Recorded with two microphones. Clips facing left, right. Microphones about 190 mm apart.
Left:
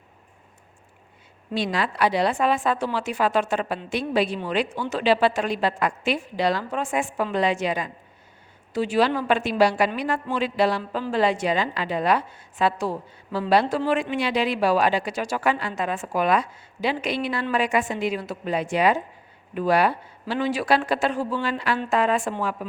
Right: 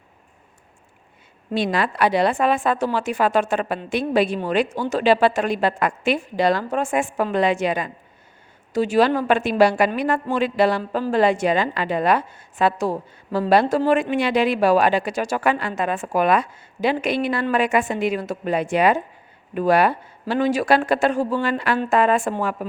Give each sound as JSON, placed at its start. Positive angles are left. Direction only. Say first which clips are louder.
{"t": 1.5, "sound": "a woman's voice", "louder": "right 3 dB", "side_deg": -55}
{"t": 8.7, "sound": "a woman's voice", "louder": "right 4 dB", "side_deg": -45}